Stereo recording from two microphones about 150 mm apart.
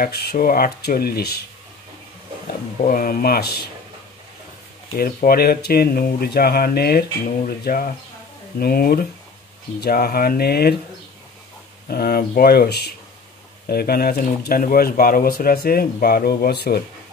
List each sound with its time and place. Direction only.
0.0 s speech: 90° left
2.8 s speech: 70° left (ahead or behind); by 3.5 s 85° left
4.9 s speech: 75° left (ahead or behind)
11.9 s speech: 90° left